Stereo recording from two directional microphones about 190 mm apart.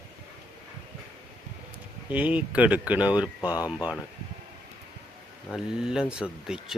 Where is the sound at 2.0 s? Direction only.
5° right (ahead or behind).